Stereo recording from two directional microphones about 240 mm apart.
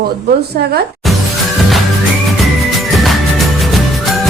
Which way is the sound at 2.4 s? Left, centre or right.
Centre.